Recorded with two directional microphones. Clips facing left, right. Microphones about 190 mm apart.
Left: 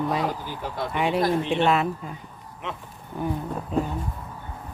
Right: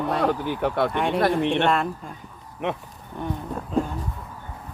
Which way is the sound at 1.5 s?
Centre (ahead or behind).